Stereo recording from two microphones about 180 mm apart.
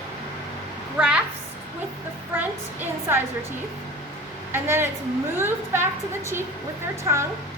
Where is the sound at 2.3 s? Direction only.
10° right (ahead or behind).